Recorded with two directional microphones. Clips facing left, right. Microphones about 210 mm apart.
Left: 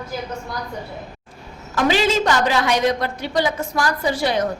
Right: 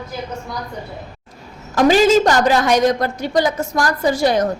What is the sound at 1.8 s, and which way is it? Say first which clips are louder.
A woman's voice: right 6 dB; 45° right (ahead or behind).